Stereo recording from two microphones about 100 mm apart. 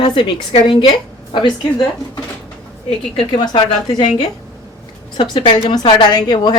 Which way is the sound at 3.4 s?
45° left (ahead or behind).